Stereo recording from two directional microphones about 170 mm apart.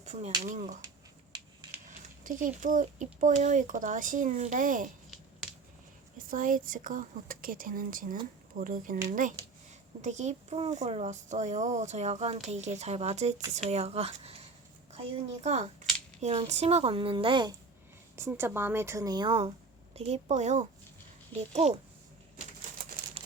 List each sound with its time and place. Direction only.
0.0 s a sound: 40° right (ahead or behind)
0.4 s a child's voice: 45° right (ahead or behind)
2.2 s a child's voice: 50° right (ahead or behind)
6.1 s a child's voice: 55° right (ahead or behind); by 14.4 s 35° right (ahead or behind)
15.4 s speech: 40° right (ahead or behind)
18.2 s speech: 15° right (ahead or behind); by 21.8 s 40° right (ahead or behind)
23.2 s crumpling: 35° right (ahead or behind)